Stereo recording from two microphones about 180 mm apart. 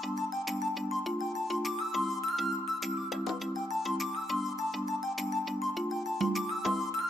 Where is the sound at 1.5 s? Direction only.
Centre (ahead or behind).